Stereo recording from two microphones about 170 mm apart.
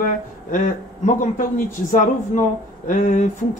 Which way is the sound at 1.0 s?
50° left (ahead or behind).